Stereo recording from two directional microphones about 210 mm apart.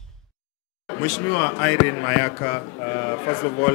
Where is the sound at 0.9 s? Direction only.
15° left (ahead or behind).